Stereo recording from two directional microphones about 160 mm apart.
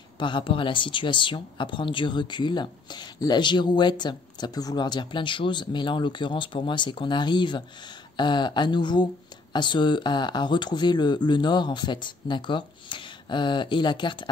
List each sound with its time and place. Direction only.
0.2 s speech: 30° left (ahead or behind)